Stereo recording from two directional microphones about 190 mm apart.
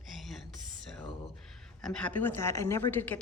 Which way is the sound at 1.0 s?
Centre (ahead or behind).